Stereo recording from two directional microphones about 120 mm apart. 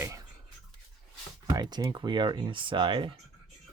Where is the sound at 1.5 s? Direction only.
30° right (ahead or behind).